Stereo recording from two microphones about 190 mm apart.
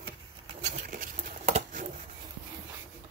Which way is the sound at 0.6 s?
40° right (ahead or behind).